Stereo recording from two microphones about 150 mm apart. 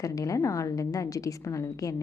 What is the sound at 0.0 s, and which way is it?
A woman's voice, 25° left (ahead or behind).